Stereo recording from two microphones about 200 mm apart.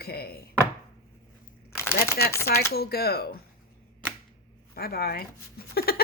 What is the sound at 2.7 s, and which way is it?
Speech, 50° left (ahead or behind).